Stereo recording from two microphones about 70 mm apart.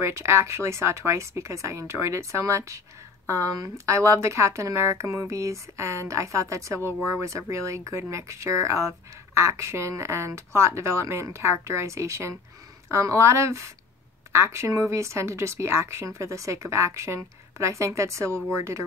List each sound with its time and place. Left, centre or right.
0.0 s speech: right